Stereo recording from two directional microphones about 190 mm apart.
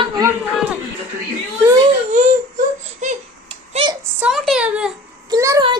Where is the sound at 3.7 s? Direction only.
25° right (ahead or behind).